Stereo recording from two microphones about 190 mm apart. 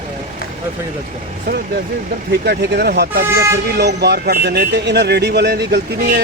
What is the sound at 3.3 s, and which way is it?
Speech, 15° right (ahead or behind).